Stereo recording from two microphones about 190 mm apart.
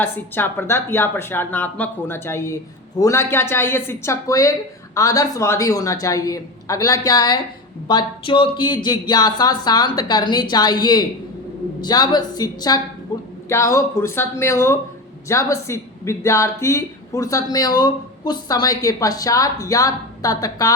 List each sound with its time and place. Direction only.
0.0 s speech: 10° left (ahead or behind)